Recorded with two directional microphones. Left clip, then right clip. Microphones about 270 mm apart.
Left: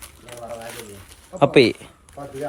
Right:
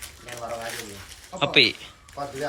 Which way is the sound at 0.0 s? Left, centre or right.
Left.